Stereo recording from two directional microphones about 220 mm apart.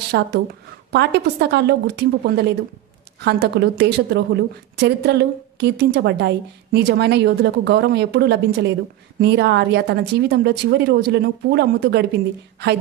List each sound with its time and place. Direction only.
0.1 s a woman's voice: 50° right (ahead or behind)